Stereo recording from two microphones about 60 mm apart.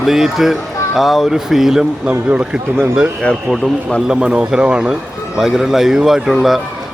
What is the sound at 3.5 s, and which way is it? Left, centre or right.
Speech, centre.